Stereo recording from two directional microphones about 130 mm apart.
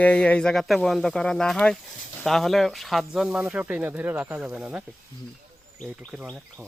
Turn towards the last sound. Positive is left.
turn(degrees=-10)  # may be behind; listen again after turning